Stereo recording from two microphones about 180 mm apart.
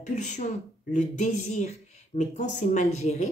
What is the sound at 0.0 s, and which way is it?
Speech, 40° left (ahead or behind).